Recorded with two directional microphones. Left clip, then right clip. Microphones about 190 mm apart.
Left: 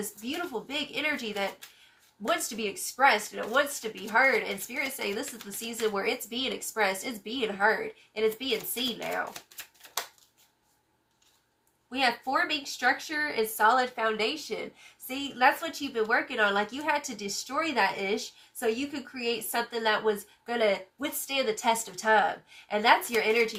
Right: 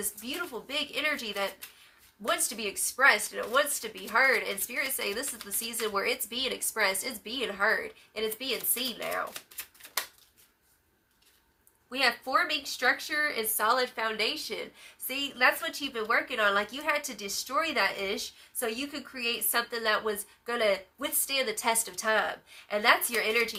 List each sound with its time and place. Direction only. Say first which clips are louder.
0.0 s a woman's voice: left 1 dB; 15° right (ahead or behind)
11.9 s a woman's voice: even; 15° right (ahead or behind)